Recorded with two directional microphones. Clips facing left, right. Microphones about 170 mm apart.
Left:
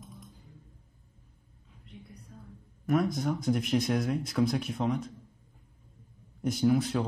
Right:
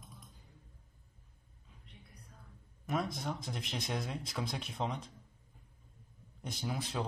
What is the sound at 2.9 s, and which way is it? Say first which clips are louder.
Speech: left 9 dB; 25° right (ahead or behind).